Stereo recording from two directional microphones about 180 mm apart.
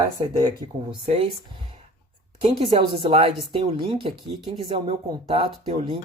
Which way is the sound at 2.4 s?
30° right (ahead or behind).